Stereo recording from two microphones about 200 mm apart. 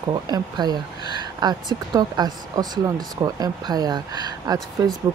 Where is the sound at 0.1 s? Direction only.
20° right (ahead or behind).